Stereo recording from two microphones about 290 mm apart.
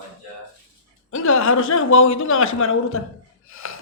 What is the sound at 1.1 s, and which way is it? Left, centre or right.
Speech, left.